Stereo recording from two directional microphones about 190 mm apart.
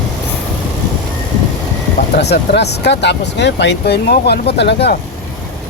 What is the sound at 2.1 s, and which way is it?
Speech, 60° left (ahead or behind).